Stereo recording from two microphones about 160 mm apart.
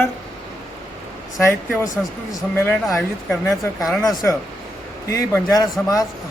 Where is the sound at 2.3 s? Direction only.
15° left (ahead or behind).